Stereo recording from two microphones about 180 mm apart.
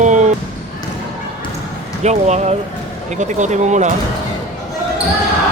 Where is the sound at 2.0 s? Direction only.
40° right (ahead or behind).